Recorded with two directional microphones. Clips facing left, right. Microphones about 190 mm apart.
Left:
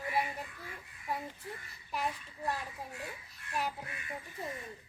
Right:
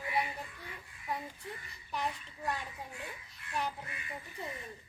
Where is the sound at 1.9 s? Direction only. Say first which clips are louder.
Left 1 dB; 5° left (ahead or behind).